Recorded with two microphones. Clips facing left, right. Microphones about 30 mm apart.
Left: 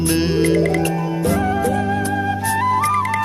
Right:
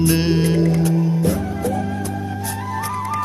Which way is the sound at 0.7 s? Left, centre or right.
Left.